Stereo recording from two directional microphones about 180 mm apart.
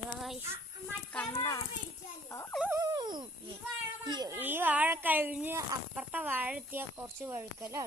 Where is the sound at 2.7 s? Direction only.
20° right (ahead or behind).